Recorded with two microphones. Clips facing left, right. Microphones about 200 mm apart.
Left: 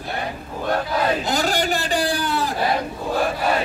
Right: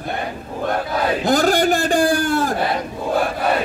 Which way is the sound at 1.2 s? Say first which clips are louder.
Right 6 dB; 50° right (ahead or behind).